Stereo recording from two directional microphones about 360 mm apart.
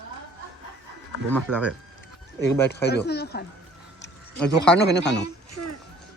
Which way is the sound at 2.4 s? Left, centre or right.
Left.